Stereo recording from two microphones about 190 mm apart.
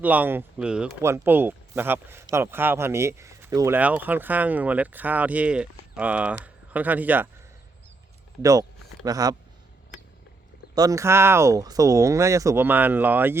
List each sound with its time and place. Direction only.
0.0 s speech: 10° right (ahead or behind)
8.4 s speech: 15° right (ahead or behind)
10.8 s speech: 15° right (ahead or behind)